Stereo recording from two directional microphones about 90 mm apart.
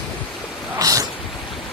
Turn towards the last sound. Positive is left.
turn(degrees=-40)  # may be behind; listen again after turning